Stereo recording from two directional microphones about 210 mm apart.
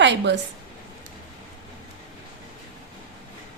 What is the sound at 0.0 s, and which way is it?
Speech, 55° right (ahead or behind).